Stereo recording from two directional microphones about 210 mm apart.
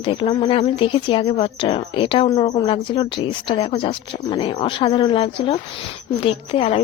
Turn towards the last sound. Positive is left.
turn(degrees=25)  # may be behind; listen again after turning